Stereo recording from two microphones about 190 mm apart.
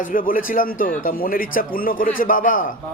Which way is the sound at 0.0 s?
45° left (ahead or behind).